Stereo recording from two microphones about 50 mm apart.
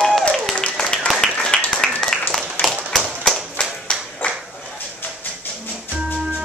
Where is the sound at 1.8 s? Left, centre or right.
Centre.